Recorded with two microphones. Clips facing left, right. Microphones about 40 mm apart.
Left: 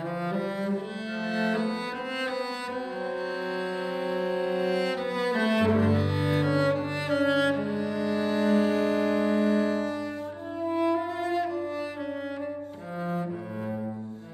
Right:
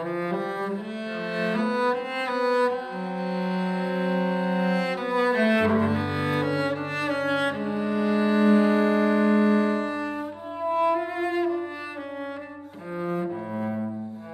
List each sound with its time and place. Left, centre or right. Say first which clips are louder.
0.1 s music: right 2 dB; centre
1.2 s cello: right 1 dB; centre
9.6 s music: right 2 dB; right
13.0 s cello: right 3 dB; centre